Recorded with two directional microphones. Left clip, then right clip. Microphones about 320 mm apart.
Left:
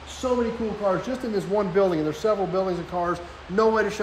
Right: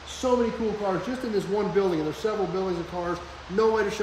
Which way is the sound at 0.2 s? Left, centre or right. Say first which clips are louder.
Even; centre.